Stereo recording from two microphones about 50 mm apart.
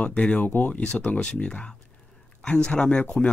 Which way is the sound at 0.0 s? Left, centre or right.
Left.